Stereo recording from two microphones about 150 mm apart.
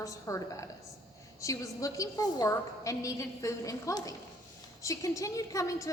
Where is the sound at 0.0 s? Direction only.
20° left (ahead or behind).